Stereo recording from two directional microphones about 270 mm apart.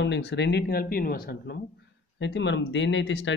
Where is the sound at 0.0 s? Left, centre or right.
Left.